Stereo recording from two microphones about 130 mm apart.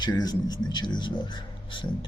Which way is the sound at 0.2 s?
30° left (ahead or behind).